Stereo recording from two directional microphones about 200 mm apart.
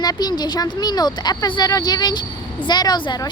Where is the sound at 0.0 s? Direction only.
20° left (ahead or behind).